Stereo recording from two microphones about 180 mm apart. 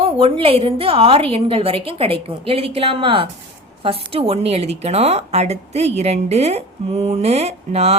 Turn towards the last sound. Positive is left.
turn(degrees=-35)  # may be behind; listen again after turning